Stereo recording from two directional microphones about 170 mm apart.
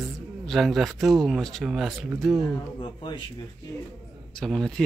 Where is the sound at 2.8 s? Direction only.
25° left (ahead or behind).